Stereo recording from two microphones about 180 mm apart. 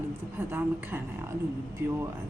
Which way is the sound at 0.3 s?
10° right (ahead or behind).